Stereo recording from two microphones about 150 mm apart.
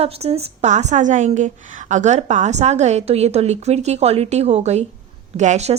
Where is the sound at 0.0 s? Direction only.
45° right (ahead or behind).